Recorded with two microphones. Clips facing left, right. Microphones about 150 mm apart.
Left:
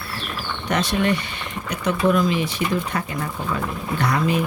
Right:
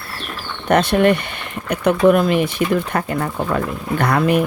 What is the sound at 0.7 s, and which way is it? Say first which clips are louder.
Speech: right 7 dB; 55° right (ahead or behind).